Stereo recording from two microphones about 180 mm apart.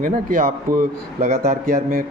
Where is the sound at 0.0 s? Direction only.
50° right (ahead or behind).